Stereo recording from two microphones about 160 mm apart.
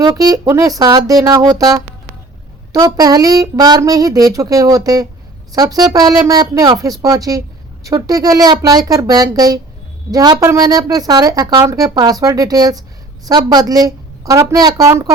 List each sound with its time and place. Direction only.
0.0 s a woman's voice: 25° right (ahead or behind)